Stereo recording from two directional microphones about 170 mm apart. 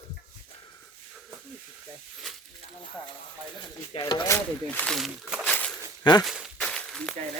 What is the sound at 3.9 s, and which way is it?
Speech, 30° left (ahead or behind).